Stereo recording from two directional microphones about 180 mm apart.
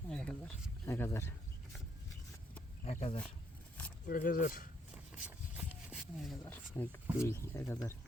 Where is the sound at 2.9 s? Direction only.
35° left (ahead or behind).